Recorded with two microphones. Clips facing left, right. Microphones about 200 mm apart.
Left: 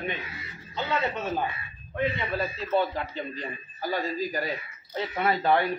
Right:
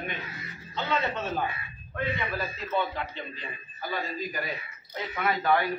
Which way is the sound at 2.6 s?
40° left (ahead or behind).